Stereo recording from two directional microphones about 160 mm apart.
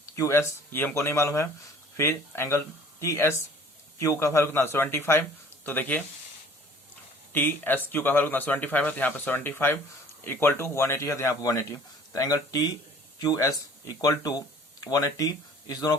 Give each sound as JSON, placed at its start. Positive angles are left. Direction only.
{"t": 0.0, "sound": "speech", "side_deg": 20}
{"t": 7.3, "sound": "speech", "side_deg": 10}